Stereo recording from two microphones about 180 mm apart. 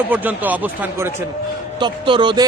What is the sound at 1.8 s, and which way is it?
Speech, 25° right (ahead or behind).